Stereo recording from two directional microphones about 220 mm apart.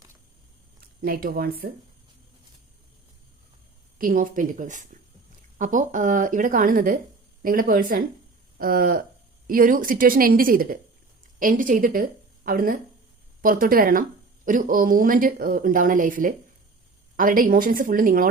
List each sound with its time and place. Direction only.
0.8 s speech: 40° right (ahead or behind)
3.9 s a woman's voice: 40° right (ahead or behind)